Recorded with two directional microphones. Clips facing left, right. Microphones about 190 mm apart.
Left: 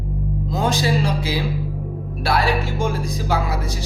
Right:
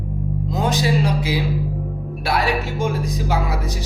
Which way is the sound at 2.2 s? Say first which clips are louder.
Left 1 dB; 20° right (ahead or behind).